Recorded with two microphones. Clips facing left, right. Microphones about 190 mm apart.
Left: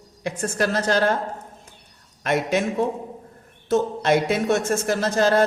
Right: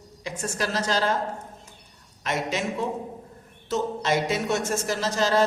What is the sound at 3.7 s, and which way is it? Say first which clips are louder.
Speech: left 6 dB; 55° left (ahead or behind).